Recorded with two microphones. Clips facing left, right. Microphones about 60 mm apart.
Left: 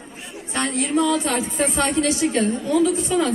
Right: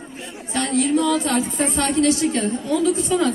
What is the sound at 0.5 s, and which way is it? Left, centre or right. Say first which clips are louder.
Speech: right 2 dB; left.